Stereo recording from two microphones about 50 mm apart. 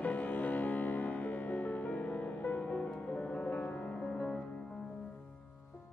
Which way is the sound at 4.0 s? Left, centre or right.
Centre.